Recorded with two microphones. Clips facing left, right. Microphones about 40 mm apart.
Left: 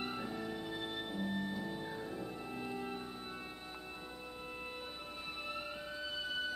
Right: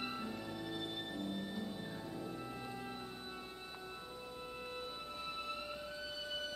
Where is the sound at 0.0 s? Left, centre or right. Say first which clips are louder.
Left 2 dB; centre.